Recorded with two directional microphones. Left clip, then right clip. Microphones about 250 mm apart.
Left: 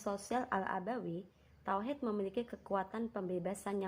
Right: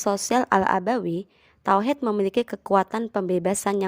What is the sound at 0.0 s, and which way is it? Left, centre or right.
A woman's voice, right.